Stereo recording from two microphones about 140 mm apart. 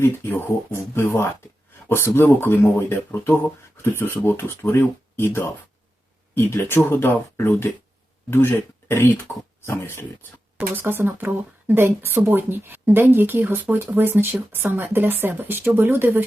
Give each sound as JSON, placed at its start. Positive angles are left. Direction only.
{"t": 0.0, "sound": "speech", "side_deg": 15}
{"t": 10.6, "sound": "speech", "side_deg": -15}